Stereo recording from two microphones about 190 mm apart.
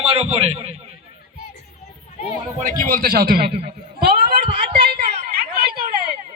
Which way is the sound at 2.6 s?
45° right (ahead or behind).